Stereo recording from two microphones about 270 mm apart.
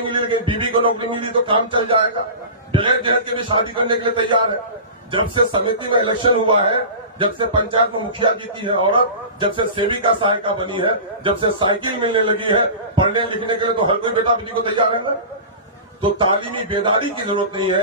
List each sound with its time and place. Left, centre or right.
0.0 s a man's voice: centre
16.0 s speech: centre